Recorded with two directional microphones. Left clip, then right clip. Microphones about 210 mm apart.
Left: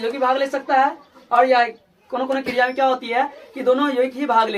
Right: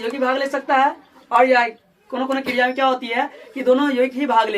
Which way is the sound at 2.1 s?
15° right (ahead or behind).